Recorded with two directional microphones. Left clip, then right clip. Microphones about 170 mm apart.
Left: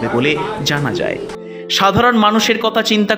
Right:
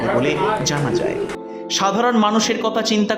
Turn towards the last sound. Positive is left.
turn(degrees=15)  # may be behind; listen again after turning